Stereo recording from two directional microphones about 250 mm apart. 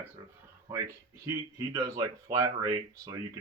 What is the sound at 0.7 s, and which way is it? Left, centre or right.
Speech, centre.